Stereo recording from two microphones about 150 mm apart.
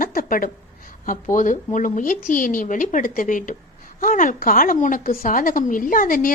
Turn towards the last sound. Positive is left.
turn(degrees=65)  # may be behind; listen again after turning